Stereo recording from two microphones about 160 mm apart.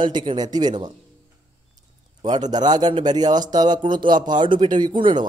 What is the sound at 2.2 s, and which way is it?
A man's voice, 25° right (ahead or behind).